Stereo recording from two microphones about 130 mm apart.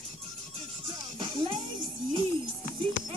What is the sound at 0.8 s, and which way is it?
Music, 40° right (ahead or behind).